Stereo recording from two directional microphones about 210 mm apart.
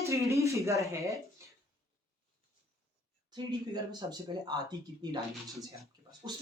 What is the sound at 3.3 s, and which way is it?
Speech, 20° right (ahead or behind).